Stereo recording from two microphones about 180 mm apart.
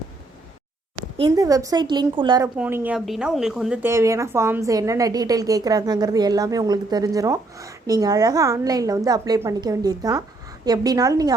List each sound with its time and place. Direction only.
1.4 s a woman's voice: 20° right (ahead or behind)
2.6 s a woman's voice: 10° right (ahead or behind)
3.8 s a woman's voice: 15° right (ahead or behind)